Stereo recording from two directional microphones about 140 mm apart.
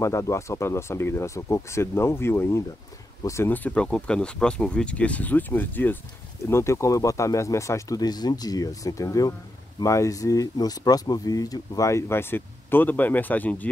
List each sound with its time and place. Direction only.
0.0 s speech: 20° left (ahead or behind)